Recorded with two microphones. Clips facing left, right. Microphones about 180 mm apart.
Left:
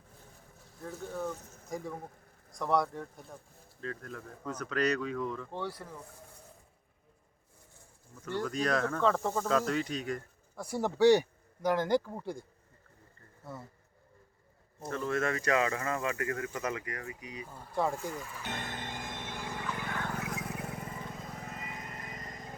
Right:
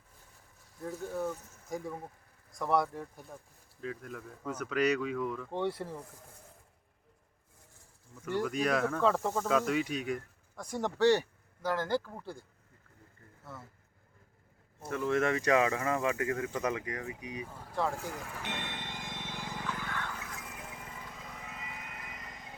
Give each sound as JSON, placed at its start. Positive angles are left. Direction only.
{"t": 0.9, "sound": "speech", "side_deg": -10}
{"t": 5.5, "sound": "speech", "side_deg": -25}
{"t": 8.2, "sound": "speech", "side_deg": -10}
{"t": 10.6, "sound": "speech", "side_deg": 10}
{"t": 14.8, "sound": "speech", "side_deg": -15}
{"t": 18.1, "sound": "speech", "side_deg": -65}
{"t": 18.5, "sound": "a sound", "side_deg": 45}
{"t": 20.1, "sound": "vehicle", "side_deg": 65}